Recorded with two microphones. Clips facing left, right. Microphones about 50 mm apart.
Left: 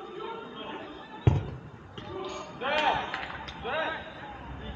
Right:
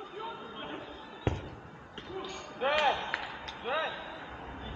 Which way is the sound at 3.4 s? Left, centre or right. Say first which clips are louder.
Left 2 dB; centre.